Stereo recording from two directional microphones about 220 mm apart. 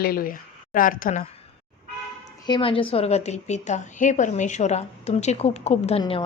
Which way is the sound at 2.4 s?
20° left (ahead or behind).